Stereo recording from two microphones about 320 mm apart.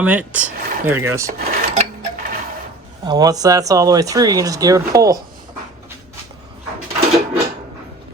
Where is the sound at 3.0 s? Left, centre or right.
Centre.